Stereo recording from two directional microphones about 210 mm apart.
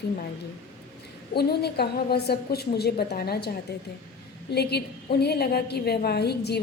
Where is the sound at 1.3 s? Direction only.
50° left (ahead or behind).